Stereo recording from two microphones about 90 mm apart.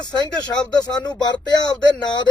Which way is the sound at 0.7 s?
50° left (ahead or behind).